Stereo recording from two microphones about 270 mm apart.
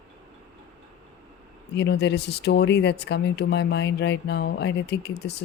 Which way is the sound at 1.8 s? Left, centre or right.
Left.